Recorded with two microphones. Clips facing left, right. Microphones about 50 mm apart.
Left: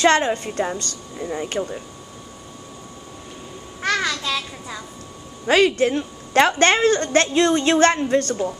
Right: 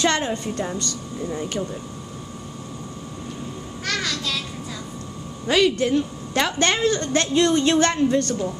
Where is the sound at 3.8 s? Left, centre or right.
Left.